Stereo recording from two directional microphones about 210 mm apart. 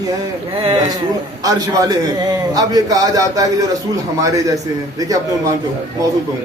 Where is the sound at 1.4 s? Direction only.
15° right (ahead or behind).